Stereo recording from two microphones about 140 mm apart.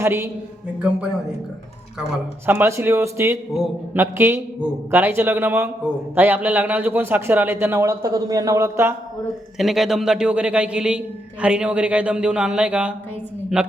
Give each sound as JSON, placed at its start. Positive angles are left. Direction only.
{"t": 0.0, "sound": "speech", "side_deg": -20}
{"t": 2.5, "sound": "a man's voice", "side_deg": -15}
{"t": 9.6, "sound": "a man's voice", "side_deg": 0}